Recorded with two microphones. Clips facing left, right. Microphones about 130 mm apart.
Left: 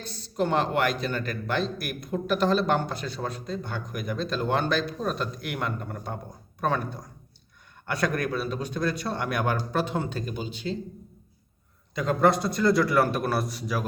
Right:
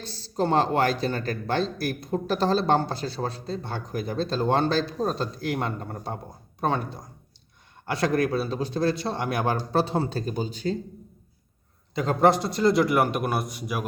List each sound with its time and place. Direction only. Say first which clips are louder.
0.0 s a man's voice: right 1 dB; 30° right (ahead or behind)
11.9 s a man's voice: right 2 dB; 25° right (ahead or behind)